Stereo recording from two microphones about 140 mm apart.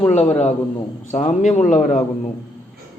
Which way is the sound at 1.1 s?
55° left (ahead or behind).